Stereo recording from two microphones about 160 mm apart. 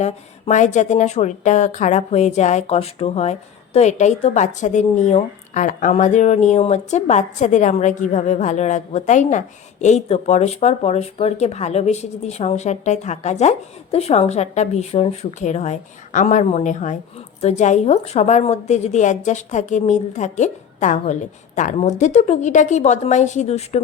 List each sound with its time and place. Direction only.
0.0 s speech: 45° left (ahead or behind)